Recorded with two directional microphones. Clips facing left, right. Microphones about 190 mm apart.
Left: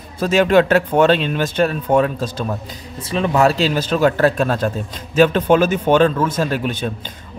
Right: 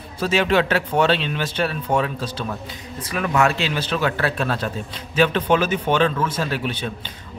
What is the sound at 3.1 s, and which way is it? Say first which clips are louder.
A man's voice: left 4 dB; 25° left (ahead or behind).